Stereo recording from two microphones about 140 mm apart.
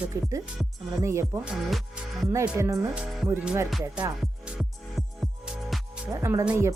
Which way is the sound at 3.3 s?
10° right (ahead or behind).